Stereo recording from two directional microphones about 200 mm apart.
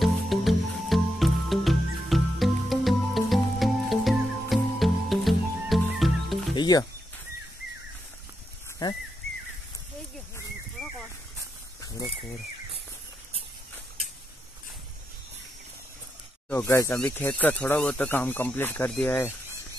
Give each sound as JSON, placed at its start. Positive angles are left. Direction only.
{"t": 0.0, "sound": "music", "side_deg": 0}
{"t": 6.5, "sound": "music", "side_deg": 20}
{"t": 8.8, "sound": "speech", "side_deg": 20}
{"t": 11.8, "sound": "speech", "side_deg": 20}
{"t": 16.4, "sound": "speech", "side_deg": 10}